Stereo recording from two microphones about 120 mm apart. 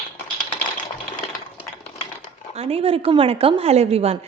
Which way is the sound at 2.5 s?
55° right (ahead or behind).